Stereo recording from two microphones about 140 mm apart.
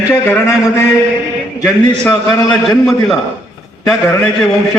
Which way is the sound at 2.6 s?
Centre (ahead or behind).